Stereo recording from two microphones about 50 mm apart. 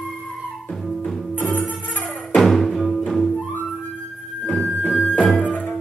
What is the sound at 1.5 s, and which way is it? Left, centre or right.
Music, left.